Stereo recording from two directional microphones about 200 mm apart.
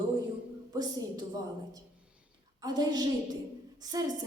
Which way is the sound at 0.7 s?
20° right (ahead or behind).